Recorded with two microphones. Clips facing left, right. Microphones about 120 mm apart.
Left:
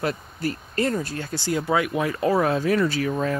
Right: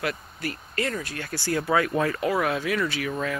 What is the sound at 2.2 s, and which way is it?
Speech, 30° left (ahead or behind).